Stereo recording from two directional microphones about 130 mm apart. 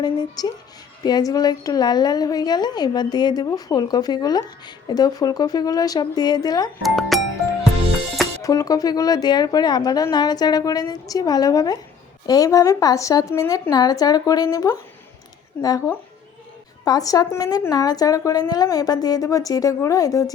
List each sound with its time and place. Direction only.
0.0 s a woman's voice: 30° left (ahead or behind)
6.8 s speech: centre (ahead or behind)
8.4 s speech: 25° left (ahead or behind)
16.8 s speech: 30° left (ahead or behind)